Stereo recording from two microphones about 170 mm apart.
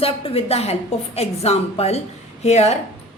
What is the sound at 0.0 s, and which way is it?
A woman's voice, 35° left (ahead or behind).